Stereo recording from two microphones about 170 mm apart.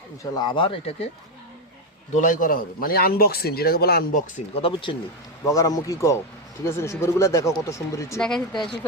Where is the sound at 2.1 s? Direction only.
50° left (ahead or behind).